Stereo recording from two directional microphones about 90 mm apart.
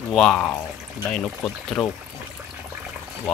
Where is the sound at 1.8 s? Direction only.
15° left (ahead or behind).